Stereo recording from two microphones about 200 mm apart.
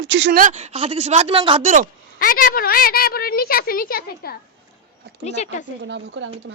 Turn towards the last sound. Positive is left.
turn(degrees=-70)  # may be behind; listen again after turning